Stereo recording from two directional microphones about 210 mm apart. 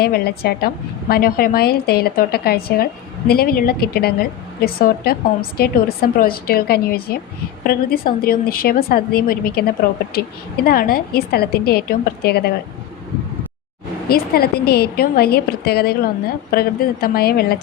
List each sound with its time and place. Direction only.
0.0 s a woman's voice: 50° left (ahead or behind)
14.1 s a woman's voice: 45° left (ahead or behind)